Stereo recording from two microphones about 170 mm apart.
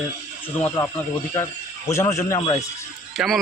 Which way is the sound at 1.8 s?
15° left (ahead or behind).